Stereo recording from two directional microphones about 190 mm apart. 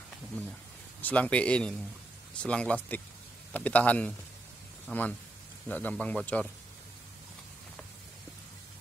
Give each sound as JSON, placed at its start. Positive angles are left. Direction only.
{"t": 1.0, "sound": "speech", "side_deg": 5}